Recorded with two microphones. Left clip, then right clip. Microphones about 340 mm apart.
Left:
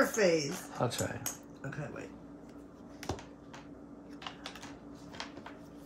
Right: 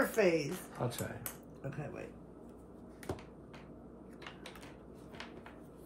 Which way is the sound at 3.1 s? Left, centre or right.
Centre.